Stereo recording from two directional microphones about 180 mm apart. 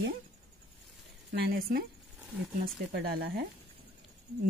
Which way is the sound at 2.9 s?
60° right (ahead or behind).